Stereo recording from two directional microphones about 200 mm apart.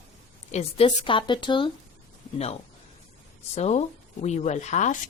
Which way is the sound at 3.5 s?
35° left (ahead or behind).